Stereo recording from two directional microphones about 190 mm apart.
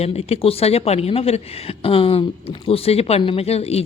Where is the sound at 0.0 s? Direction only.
35° left (ahead or behind).